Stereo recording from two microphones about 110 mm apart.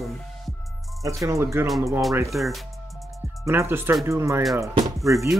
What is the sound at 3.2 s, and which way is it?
Speech, 25° right (ahead or behind).